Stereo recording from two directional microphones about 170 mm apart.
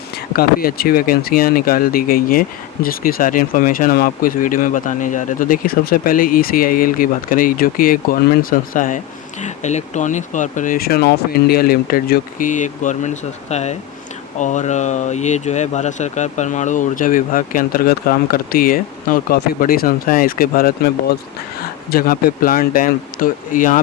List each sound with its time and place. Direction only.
0.3 s speech: 60° left (ahead or behind)